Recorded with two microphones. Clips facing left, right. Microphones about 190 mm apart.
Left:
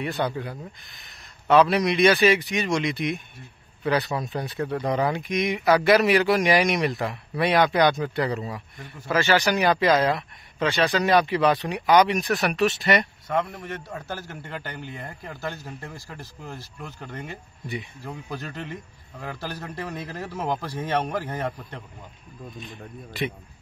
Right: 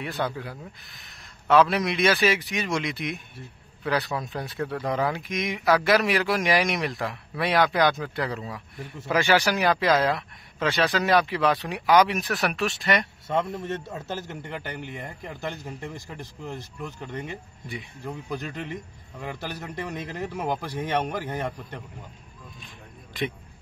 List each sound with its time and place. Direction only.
0.0 s speech: centre (ahead or behind)
9.1 s speech: 10° right (ahead or behind)
13.3 s a man's voice: 25° right (ahead or behind)
18.3 s a man's voice: 15° right (ahead or behind)